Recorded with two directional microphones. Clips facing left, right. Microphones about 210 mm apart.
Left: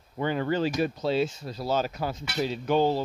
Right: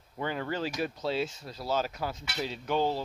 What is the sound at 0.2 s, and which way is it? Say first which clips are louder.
Speech: left 6 dB; 25° left (ahead or behind).